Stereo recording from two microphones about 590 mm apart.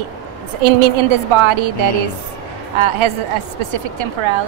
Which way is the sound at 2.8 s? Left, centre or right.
Right.